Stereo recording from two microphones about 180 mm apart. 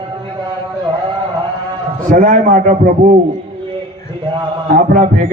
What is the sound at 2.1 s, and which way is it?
Speech, 50° right (ahead or behind).